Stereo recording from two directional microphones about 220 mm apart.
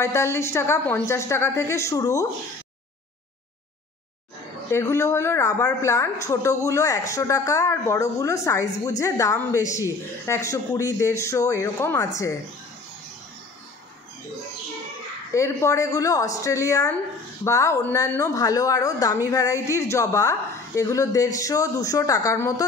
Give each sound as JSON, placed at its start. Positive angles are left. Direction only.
{"t": 0.0, "sound": "speech", "side_deg": 10}
{"t": 4.6, "sound": "speech", "side_deg": 10}
{"t": 15.3, "sound": "speech", "side_deg": 15}